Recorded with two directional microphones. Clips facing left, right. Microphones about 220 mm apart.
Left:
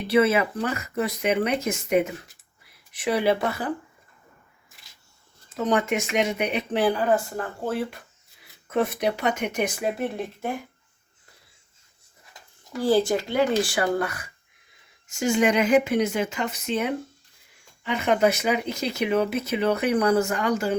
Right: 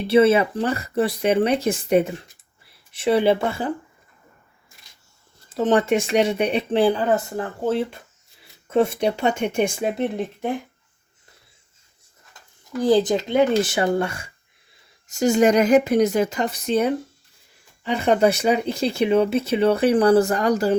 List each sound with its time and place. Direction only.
0.1 s speech: 30° right (ahead or behind)
5.5 s speech: 30° right (ahead or behind)
12.8 s speech: 20° right (ahead or behind)
15.0 s speech: 40° right (ahead or behind)